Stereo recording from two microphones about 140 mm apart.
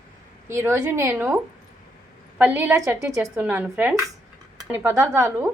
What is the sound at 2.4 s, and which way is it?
A woman's voice, 10° right (ahead or behind).